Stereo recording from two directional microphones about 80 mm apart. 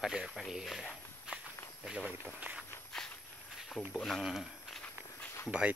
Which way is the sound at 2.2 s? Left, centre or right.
Centre.